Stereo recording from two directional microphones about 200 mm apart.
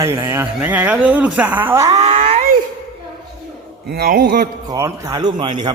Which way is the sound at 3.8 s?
50° right (ahead or behind).